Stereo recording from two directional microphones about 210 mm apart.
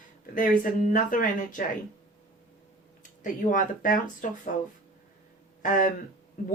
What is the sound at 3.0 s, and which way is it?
Speech, 40° left (ahead or behind).